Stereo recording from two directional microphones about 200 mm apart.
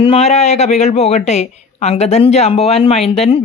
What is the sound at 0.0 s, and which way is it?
Speech, 30° left (ahead or behind).